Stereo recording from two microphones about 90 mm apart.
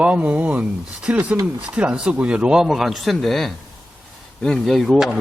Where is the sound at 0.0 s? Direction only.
15° right (ahead or behind).